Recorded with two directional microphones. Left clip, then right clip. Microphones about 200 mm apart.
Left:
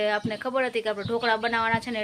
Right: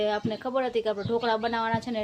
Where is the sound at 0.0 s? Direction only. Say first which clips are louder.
Left 2 dB; centre (ahead or behind).